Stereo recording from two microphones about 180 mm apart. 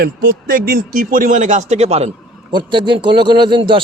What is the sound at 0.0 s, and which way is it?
A man's voice, 55° right (ahead or behind).